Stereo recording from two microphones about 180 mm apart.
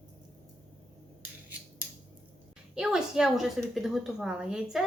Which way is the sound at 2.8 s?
5° right (ahead or behind).